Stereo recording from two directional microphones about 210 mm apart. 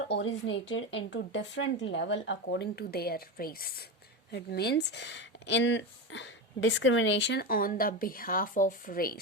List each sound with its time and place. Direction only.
0.1 s speech: 60° left (ahead or behind); by 9.1 s 45° left (ahead or behind)